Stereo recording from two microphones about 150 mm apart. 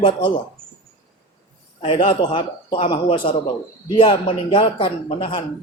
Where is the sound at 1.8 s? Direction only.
35° left (ahead or behind).